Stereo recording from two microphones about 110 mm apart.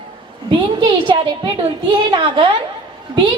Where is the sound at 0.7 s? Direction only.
45° right (ahead or behind).